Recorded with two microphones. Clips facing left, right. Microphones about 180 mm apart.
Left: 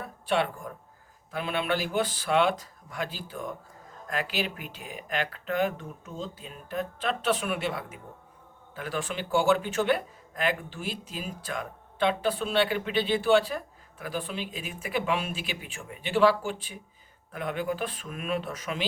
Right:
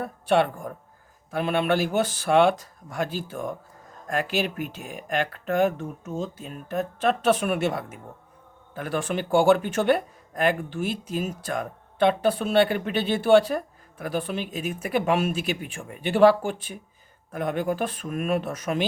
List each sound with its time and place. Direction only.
0.0 s speech: 55° right (ahead or behind)